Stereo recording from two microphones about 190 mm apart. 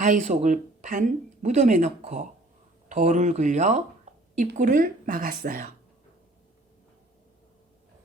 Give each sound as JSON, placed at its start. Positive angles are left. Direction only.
{"t": 0.0, "sound": "speech", "side_deg": -40}